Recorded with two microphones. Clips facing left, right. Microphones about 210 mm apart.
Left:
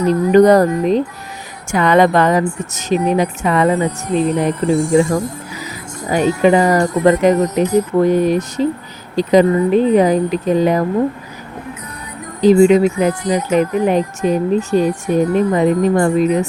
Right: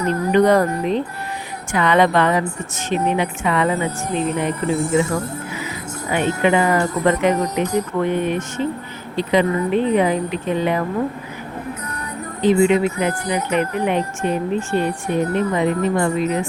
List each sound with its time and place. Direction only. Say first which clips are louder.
0.0 s a woman's voice: left 6 dB; 40° left (ahead or behind)
6.1 s speech: left 5 dB; 40° left (ahead or behind)
12.4 s speech: left 6 dB; 40° left (ahead or behind)